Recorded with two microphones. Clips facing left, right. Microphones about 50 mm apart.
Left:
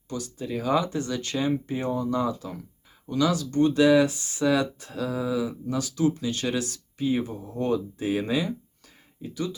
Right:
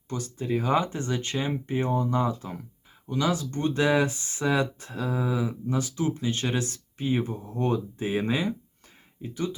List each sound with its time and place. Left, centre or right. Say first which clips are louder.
0.1 s speech: right 2 dB; right